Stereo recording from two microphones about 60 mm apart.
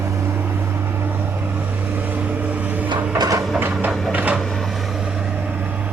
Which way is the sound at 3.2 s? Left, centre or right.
Right.